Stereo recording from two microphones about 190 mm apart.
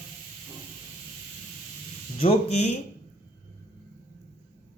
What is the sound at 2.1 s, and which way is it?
Speech, 30° left (ahead or behind).